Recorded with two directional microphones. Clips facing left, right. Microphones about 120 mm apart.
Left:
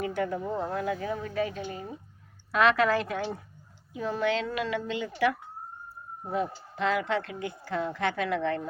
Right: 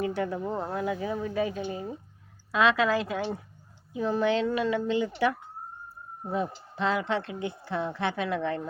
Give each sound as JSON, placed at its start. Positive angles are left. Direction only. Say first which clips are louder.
{"t": 0.3, "sound": "speech", "louder": "even", "side_deg": -10}